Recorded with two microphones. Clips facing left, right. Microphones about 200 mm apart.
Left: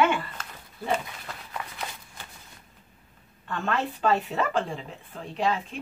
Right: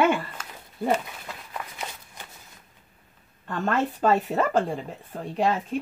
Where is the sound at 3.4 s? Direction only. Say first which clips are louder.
Right 3 dB; 45° right (ahead or behind).